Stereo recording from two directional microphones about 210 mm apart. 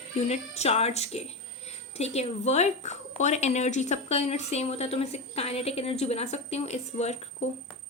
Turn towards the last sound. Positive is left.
turn(degrees=30)  # may be behind; listen again after turning